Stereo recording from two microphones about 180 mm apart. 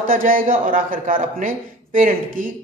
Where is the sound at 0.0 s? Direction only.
50° right (ahead or behind).